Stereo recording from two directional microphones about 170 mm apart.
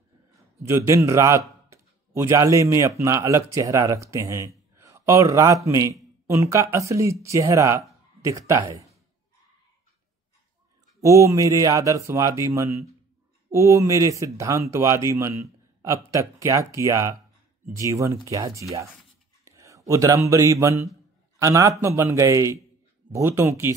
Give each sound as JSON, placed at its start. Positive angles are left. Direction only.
{"t": 0.6, "sound": "a man's voice", "side_deg": -15}
{"t": 11.0, "sound": "speech", "side_deg": -20}